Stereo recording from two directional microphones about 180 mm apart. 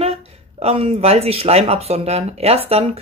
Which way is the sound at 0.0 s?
35° right (ahead or behind).